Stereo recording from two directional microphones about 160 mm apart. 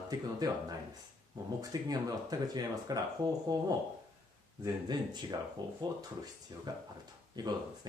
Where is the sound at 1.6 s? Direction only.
25° right (ahead or behind).